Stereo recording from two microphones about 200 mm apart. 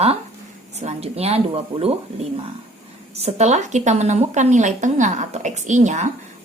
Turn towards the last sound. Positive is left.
turn(degrees=-35)  # may be behind; listen again after turning